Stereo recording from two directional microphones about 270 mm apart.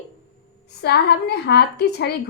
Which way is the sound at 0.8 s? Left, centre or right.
Left.